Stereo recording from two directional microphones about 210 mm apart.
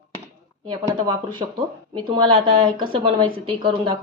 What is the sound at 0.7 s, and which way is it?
Speech, 20° right (ahead or behind).